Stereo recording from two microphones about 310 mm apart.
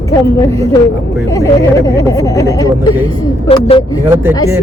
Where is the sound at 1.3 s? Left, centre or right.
Centre.